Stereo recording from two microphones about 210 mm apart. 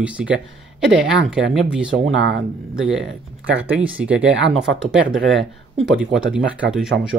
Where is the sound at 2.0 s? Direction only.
55° right (ahead or behind).